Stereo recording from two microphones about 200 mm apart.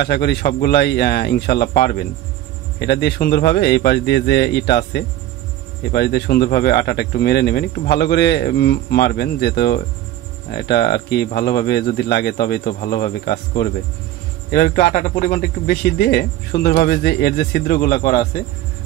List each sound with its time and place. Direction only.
0.0 s speech: 55° left (ahead or behind)